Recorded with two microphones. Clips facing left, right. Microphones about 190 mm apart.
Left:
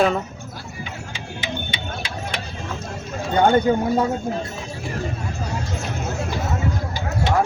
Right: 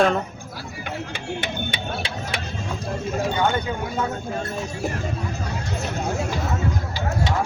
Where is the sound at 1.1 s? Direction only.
60° right (ahead or behind).